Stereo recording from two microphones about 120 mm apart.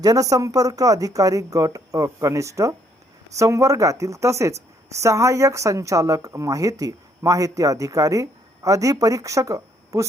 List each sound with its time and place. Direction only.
0.0 s speech: 30° right (ahead or behind)